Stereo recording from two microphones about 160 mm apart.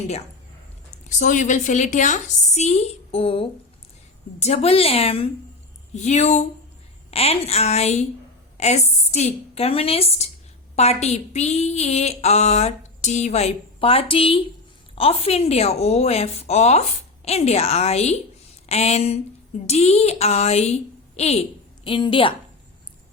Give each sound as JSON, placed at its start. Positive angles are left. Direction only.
{"t": 1.0, "sound": "a woman's voice", "side_deg": 50}